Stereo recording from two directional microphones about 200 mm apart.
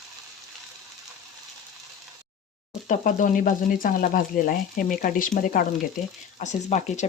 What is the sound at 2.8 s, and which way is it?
Speech, 40° left (ahead or behind).